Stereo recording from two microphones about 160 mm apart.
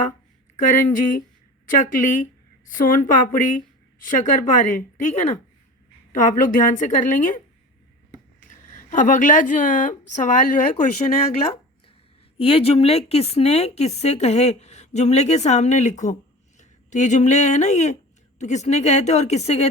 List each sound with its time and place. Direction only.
0.5 s a woman's voice: 55° left (ahead or behind)
2.7 s a woman's voice: 55° left (ahead or behind)
8.7 s speech: 55° left (ahead or behind)
12.4 s speech: 35° left (ahead or behind)